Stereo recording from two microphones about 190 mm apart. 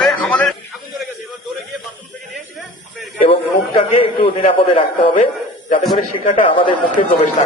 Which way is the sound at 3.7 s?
30° left (ahead or behind).